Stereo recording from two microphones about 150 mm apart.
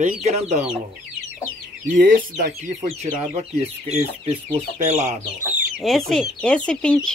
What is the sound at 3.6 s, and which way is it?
Speech, 40° right (ahead or behind).